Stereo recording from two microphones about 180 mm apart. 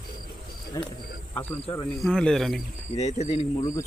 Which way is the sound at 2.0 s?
5° left (ahead or behind).